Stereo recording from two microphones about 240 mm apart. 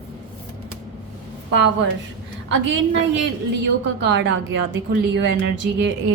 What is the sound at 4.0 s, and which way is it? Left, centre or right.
A woman's voice, right.